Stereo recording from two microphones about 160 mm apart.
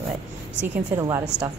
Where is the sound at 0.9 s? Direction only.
20° right (ahead or behind).